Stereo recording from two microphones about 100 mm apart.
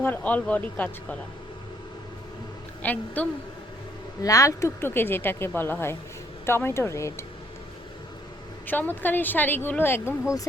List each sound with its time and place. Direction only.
0.0 s speech: 15° left (ahead or behind)
2.8 s speech: 15° left (ahead or behind)
4.2 s speech: 35° left (ahead or behind)
8.6 s speech: 20° left (ahead or behind)